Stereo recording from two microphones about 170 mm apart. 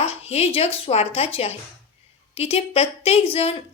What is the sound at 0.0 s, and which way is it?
A woman's voice, 35° left (ahead or behind).